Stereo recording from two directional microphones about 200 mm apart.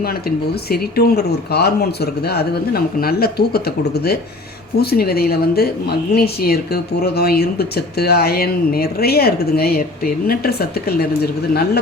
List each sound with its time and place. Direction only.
0.0 s speech: 50° left (ahead or behind)